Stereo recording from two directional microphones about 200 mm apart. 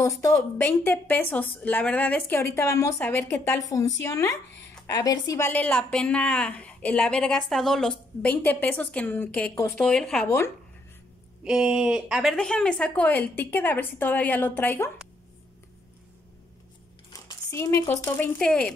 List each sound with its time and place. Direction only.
0.0 s a woman's voice: 10° left (ahead or behind)
4.5 s a sound: 60° left (ahead or behind)
4.8 s a woman's voice: 15° left (ahead or behind)
11.4 s a woman's voice: 5° right (ahead or behind)
17.1 s speech: 20° left (ahead or behind)